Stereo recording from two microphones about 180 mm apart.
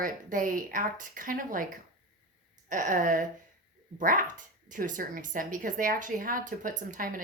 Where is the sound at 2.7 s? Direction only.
45° right (ahead or behind).